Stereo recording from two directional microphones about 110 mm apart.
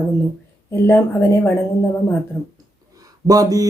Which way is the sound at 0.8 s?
20° left (ahead or behind).